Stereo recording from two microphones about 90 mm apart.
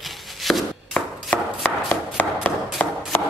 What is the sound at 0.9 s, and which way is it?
Chopping, 10° left (ahead or behind).